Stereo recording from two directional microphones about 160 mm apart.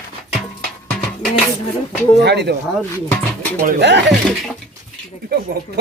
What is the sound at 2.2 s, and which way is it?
Speech, 90° right.